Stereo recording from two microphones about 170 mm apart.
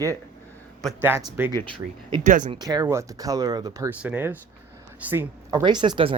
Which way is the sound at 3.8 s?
10° right (ahead or behind).